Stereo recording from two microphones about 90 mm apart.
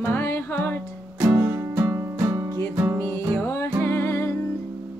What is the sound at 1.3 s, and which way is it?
Music, 25° right (ahead or behind).